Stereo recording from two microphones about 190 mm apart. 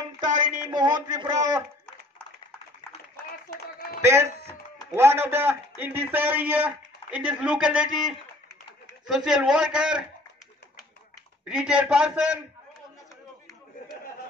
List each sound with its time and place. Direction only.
0.7 s a man's voice: 20° right (ahead or behind)
4.0 s a man's voice: 15° right (ahead or behind)
11.4 s a man's voice: 5° right (ahead or behind)